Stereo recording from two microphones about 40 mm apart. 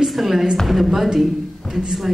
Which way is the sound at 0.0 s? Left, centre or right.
Centre.